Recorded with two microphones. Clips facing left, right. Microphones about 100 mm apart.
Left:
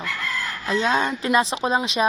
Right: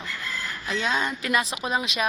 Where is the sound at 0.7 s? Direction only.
25° left (ahead or behind).